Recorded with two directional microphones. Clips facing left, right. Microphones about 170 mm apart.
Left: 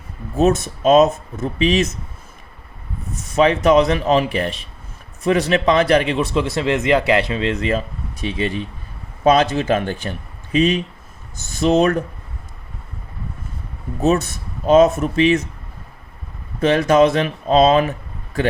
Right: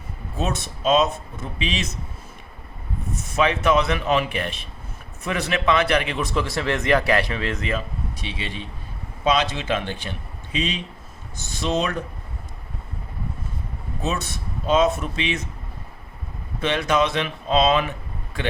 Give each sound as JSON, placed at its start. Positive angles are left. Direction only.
{"t": 0.3, "sound": "speech", "side_deg": 45}
{"t": 3.3, "sound": "a man's voice", "side_deg": 35}
{"t": 8.2, "sound": "speech", "side_deg": 45}
{"t": 14.0, "sound": "speech", "side_deg": 45}
{"t": 16.6, "sound": "speech", "side_deg": 45}